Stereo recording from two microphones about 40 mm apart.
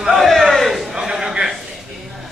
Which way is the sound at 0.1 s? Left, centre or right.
Centre.